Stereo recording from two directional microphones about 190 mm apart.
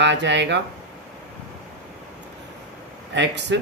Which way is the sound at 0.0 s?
70° right (ahead or behind).